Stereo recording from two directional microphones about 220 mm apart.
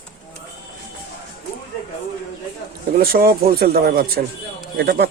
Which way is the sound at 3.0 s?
45° right (ahead or behind).